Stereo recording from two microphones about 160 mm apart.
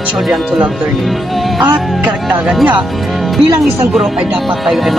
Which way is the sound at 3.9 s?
Centre (ahead or behind).